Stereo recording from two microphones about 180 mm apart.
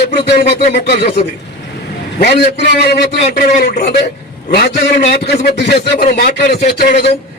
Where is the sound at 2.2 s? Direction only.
65° left (ahead or behind).